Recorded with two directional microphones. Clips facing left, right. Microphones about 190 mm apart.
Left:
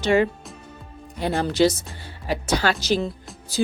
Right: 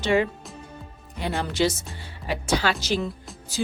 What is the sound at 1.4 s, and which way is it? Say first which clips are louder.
Speech: left 5 dB; 35° left (ahead or behind).